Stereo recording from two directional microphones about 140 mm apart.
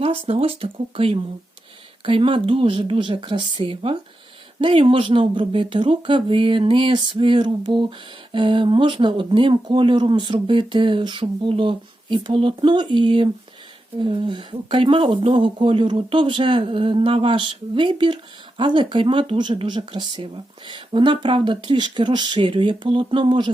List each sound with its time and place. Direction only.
0.0 s speech: 45° right (ahead or behind)